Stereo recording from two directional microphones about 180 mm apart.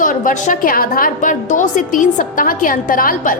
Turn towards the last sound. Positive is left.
turn(degrees=50)  # may be behind; listen again after turning